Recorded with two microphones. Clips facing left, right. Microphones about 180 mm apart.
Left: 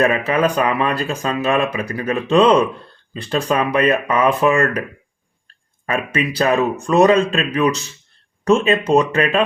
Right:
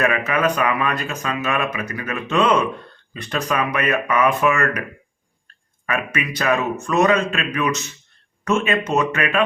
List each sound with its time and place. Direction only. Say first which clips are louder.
0.0 s speech: left 3 dB; 30° left (ahead or behind)
5.8 s speech: left 4 dB; 30° left (ahead or behind)